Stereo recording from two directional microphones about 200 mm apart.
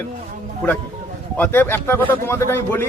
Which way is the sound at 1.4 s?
10° left (ahead or behind).